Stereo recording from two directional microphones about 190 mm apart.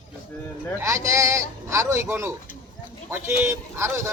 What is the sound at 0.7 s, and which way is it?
A man's voice, 15° right (ahead or behind).